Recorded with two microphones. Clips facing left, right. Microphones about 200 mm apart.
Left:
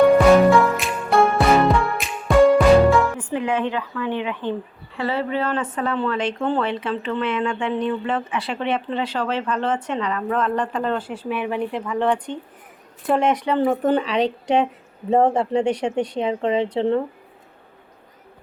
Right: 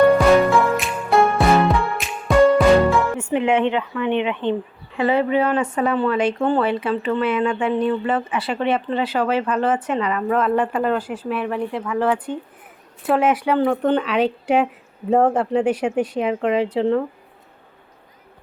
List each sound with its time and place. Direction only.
0.1 s music: centre (ahead or behind)
3.2 s speech: 25° right (ahead or behind); by 17.0 s centre (ahead or behind)